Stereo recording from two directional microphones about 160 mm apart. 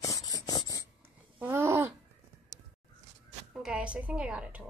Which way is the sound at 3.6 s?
5° right (ahead or behind).